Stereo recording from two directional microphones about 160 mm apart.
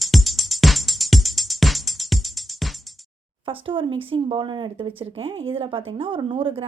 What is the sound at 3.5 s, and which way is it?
A woman's voice, 35° right (ahead or behind).